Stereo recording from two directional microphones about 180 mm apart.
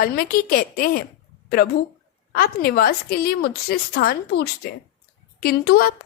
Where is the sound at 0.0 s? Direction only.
55° left (ahead or behind).